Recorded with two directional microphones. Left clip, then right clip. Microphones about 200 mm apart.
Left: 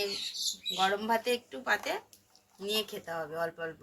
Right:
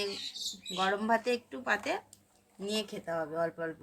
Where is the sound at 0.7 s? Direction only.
Centre (ahead or behind).